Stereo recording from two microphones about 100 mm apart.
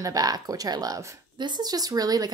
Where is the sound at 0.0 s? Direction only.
40° right (ahead or behind).